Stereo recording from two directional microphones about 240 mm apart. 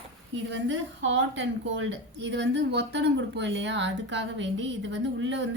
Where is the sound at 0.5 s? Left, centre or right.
Right.